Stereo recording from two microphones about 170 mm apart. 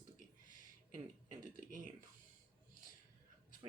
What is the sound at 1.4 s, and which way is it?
Speech, 50° right (ahead or behind).